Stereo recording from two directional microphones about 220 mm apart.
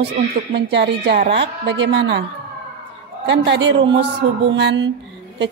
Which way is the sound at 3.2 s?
55° right (ahead or behind).